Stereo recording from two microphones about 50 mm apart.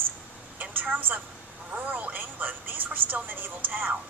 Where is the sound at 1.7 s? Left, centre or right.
Right.